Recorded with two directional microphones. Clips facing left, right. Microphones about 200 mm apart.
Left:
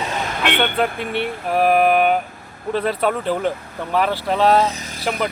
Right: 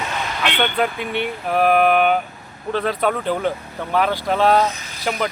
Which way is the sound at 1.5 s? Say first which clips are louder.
Even; centre (ahead or behind).